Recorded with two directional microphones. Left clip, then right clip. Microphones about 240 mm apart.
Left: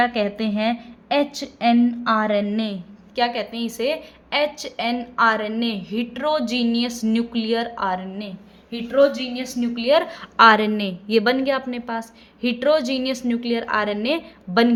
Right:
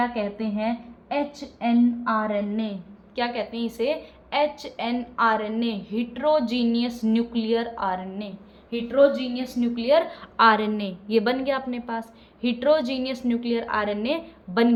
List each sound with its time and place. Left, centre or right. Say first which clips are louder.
0.0 s a woman's voice: left 6 dB; left